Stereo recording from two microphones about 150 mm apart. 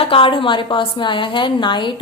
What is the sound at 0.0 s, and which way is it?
A woman's voice, 35° left (ahead or behind).